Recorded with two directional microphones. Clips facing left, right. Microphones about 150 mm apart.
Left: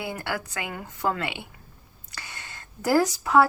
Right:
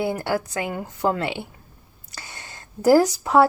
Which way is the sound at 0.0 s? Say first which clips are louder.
Right 7 dB; 30° right (ahead or behind).